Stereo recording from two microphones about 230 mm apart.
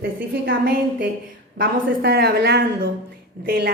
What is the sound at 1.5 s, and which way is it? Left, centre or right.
A woman's voice, right.